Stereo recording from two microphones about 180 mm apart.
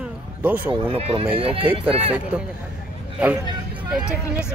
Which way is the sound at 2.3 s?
5° right (ahead or behind).